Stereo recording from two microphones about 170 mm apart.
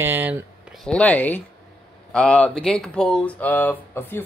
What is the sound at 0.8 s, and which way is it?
A woman's voice, 5° left (ahead or behind).